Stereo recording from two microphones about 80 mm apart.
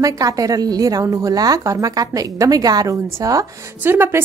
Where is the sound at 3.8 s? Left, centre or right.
Right.